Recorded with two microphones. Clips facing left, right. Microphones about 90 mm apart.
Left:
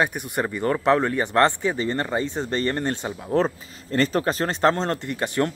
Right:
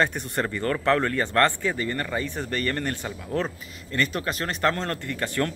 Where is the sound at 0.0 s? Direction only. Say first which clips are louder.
Left 1 dB; 10° left (ahead or behind).